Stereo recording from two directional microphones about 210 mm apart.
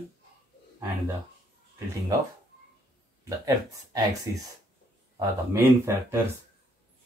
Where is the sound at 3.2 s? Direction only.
15° right (ahead or behind).